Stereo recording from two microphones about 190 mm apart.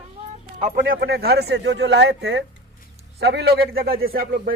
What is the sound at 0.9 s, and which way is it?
A man's voice, 55° right (ahead or behind).